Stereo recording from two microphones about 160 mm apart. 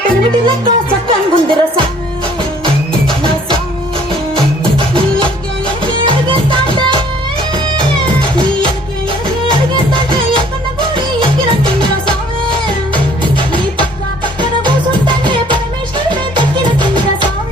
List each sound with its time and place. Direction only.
0.4 s music: 30° right (ahead or behind)
5.8 s music: 30° right (ahead or behind)
10.1 s music: 30° right (ahead or behind)
14.6 s music: 30° right (ahead or behind)